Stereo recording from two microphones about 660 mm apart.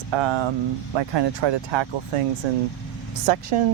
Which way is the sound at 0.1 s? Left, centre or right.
Right.